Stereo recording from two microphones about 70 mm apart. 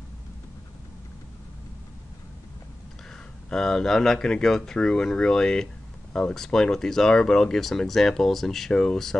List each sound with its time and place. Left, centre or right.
3.4 s speech: centre